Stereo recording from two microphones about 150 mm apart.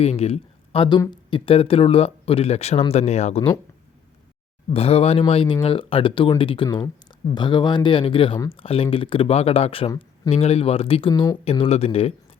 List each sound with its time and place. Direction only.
0.0 s speech: 45° left (ahead or behind)
4.7 s speech: 40° left (ahead or behind)
11.1 s speech: 25° left (ahead or behind)
11.4 s speech: 40° left (ahead or behind)